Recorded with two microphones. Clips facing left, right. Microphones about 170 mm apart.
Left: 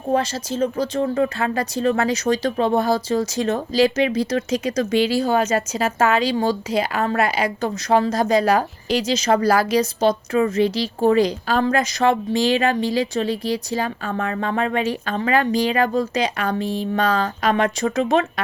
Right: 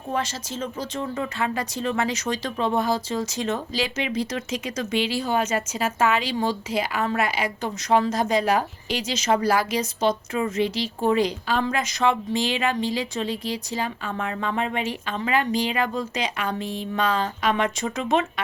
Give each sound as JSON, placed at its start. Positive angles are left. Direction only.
{"t": 0.1, "sound": "speech", "side_deg": 35}